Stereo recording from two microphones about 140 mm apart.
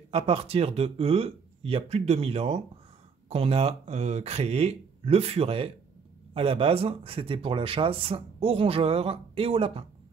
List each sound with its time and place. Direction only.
0.1 s speech: 45° right (ahead or behind)